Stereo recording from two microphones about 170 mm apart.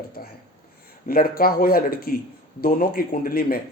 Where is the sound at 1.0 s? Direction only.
60° left (ahead or behind).